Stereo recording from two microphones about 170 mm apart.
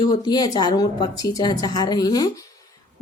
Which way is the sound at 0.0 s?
25° left (ahead or behind).